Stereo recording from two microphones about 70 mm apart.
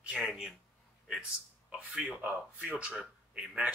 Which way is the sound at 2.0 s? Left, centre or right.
Right.